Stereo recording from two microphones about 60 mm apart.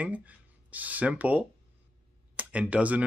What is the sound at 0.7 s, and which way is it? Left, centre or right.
Speech, right.